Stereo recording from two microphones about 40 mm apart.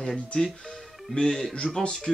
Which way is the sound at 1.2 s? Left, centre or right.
Left.